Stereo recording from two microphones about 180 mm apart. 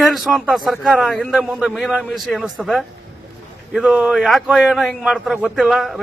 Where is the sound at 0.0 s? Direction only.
Centre (ahead or behind).